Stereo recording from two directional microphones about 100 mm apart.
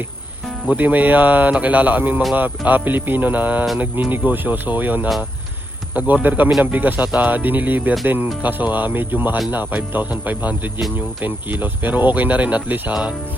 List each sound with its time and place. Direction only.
0.7 s speech: 15° right (ahead or behind)